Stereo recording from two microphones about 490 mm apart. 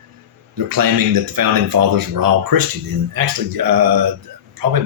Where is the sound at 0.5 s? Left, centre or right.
Right.